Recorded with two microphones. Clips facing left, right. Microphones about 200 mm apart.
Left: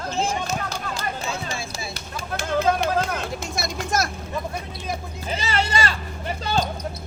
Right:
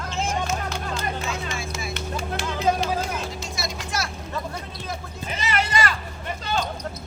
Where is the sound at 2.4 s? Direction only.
50° left (ahead or behind).